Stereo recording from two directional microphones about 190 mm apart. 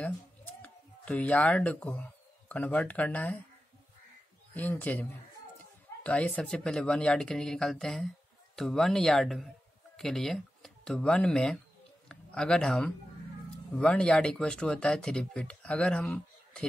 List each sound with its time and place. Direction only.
0.6 s speech: 5° left (ahead or behind)
4.6 s speech: 10° left (ahead or behind)
6.0 s speech: 5° left (ahead or behind)